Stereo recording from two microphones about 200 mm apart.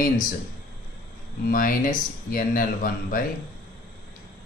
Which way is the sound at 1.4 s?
45° left (ahead or behind).